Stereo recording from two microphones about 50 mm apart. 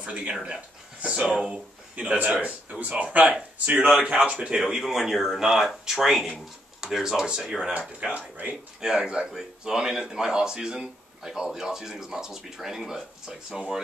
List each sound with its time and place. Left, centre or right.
0.0 s speech: right
3.9 s speech: centre
4.6 s speech: centre
8.0 s speech: right; by 13.7 s centre